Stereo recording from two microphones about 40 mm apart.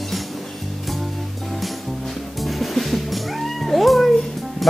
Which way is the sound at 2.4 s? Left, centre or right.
Centre.